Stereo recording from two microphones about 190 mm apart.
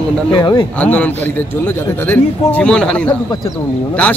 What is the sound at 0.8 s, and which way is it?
A man's voice, 10° left (ahead or behind).